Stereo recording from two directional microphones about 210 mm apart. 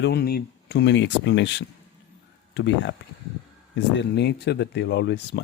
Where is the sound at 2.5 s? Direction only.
55° left (ahead or behind).